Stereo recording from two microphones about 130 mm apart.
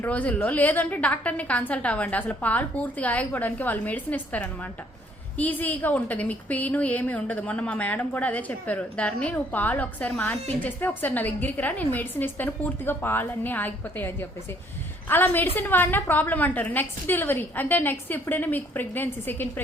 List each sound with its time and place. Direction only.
0.0 s a woman's voice: 10° left (ahead or behind)